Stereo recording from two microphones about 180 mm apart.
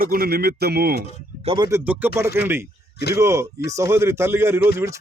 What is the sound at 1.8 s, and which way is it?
Speech, 10° right (ahead or behind).